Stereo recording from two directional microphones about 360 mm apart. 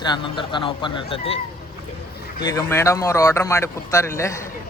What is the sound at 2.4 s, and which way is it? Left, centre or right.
Speech, centre.